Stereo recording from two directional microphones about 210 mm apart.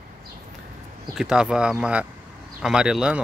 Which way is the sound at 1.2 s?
5° right (ahead or behind).